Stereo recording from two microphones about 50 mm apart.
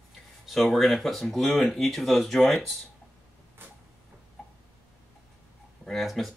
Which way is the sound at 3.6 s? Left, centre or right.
Right.